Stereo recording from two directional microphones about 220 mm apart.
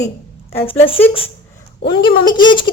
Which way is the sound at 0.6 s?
25° left (ahead or behind).